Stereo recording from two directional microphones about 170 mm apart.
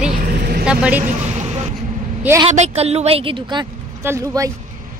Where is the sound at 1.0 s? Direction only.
40° right (ahead or behind).